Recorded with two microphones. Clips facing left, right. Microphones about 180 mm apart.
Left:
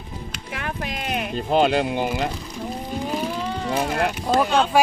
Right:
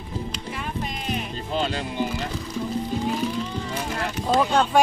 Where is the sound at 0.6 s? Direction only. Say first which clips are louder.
Left 4 dB; 70° left (ahead or behind).